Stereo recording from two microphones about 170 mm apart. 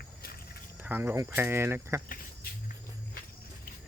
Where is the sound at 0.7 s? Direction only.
10° right (ahead or behind).